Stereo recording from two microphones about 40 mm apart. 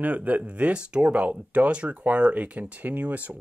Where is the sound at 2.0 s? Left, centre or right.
Right.